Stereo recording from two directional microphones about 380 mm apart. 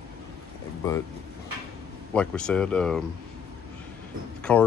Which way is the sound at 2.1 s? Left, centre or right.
Centre.